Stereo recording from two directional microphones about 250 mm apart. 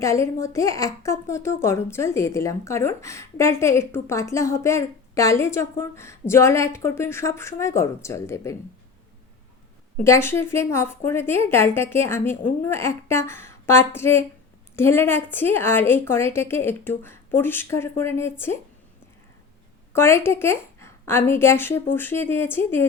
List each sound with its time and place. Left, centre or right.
0.0 s a woman's voice: centre
10.0 s a woman's voice: centre
19.9 s a woman's voice: centre